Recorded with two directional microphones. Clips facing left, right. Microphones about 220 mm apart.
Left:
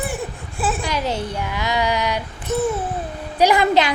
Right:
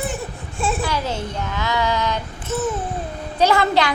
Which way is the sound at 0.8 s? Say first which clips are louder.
Left 1 dB; 15° left (ahead or behind).